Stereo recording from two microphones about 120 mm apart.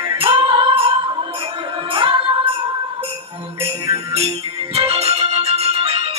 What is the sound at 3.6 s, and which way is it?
Music, 55° right (ahead or behind).